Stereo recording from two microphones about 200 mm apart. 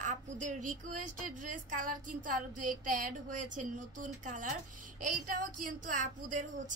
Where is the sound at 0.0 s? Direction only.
40° right (ahead or behind).